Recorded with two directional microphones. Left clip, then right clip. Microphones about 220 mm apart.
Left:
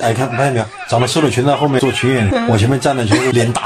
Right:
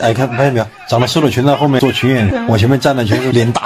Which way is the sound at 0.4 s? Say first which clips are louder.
Right 2 dB; 45° right (ahead or behind).